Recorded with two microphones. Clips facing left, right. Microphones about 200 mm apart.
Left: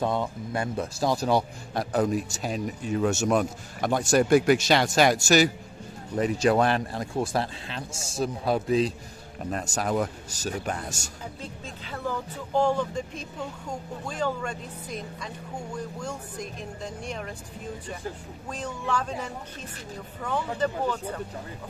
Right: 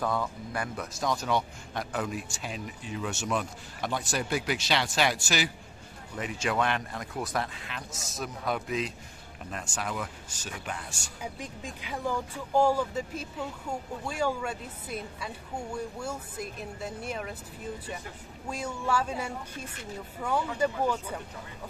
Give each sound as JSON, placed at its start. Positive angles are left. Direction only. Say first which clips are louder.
{"t": 0.0, "sound": "speech", "louder": "left 3 dB", "side_deg": 25}
{"t": 11.4, "sound": "speech", "louder": "left 1 dB", "side_deg": -15}
{"t": 18.5, "sound": "speech", "louder": "even", "side_deg": -10}